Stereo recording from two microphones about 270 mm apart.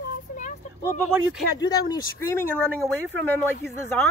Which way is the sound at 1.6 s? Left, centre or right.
Centre.